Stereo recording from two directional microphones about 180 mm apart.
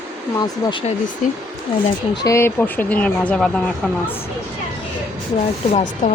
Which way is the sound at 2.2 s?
15° left (ahead or behind).